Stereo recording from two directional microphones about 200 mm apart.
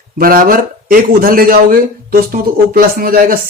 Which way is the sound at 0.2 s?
45° right (ahead or behind).